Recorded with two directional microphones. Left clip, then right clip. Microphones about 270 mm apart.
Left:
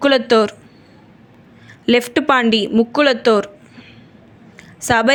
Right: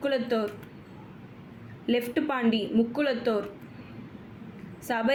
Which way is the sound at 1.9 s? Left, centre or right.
Left.